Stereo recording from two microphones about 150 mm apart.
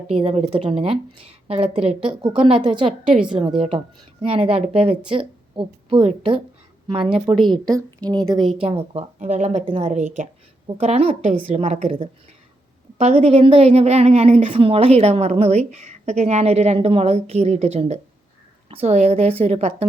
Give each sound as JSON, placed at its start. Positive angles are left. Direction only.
{"t": 0.1, "sound": "a woman's voice", "side_deg": -40}
{"t": 3.1, "sound": "a woman's voice", "side_deg": -5}
{"t": 4.2, "sound": "a woman's voice", "side_deg": -40}
{"t": 7.4, "sound": "a woman's voice", "side_deg": -25}
{"t": 9.1, "sound": "a woman's voice", "side_deg": -50}
{"t": 13.0, "sound": "a woman's voice", "side_deg": -45}